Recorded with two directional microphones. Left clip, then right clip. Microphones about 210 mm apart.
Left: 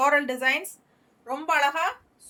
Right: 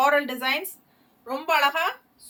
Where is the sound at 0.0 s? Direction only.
20° left (ahead or behind).